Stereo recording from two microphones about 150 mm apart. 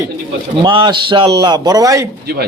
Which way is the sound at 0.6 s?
35° right (ahead or behind).